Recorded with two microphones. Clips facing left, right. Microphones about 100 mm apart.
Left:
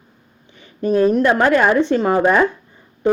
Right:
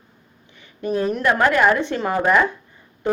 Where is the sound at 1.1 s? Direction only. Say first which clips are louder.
Left 2 dB; 25° left (ahead or behind).